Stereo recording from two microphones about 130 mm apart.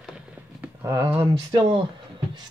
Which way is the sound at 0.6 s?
15° right (ahead or behind).